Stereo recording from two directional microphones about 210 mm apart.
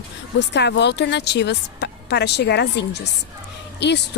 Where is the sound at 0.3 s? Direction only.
55° left (ahead or behind).